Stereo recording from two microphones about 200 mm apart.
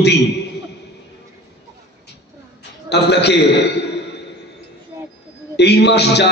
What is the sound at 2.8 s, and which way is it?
Speech, 55° left (ahead or behind).